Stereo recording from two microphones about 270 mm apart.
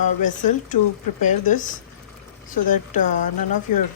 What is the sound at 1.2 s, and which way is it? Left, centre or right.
A woman's voice, left.